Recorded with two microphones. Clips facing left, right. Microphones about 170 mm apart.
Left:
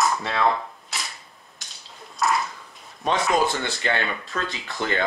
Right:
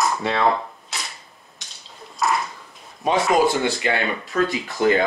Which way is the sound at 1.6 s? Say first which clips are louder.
Right 2 dB; centre (ahead or behind).